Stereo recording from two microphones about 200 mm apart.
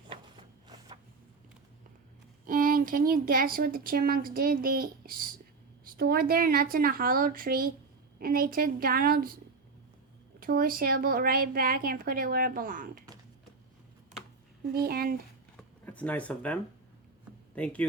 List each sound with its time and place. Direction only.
2.5 s speech: 45° right (ahead or behind)
10.4 s speech: 45° right (ahead or behind)
14.7 s speech: 50° right (ahead or behind)
15.8 s speech: 5° left (ahead or behind)